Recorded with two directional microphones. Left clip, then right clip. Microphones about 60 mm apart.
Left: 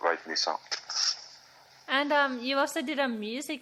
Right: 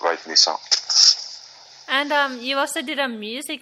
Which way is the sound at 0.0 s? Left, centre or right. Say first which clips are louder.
Right 10 dB; right.